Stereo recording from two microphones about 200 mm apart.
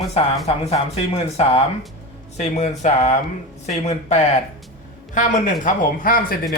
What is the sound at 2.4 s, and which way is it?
Speech, 35° left (ahead or behind).